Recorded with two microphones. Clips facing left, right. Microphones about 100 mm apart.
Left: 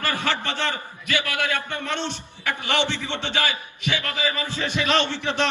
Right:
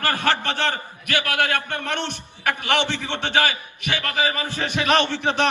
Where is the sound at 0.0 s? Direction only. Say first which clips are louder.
Right 3 dB; 55° right (ahead or behind).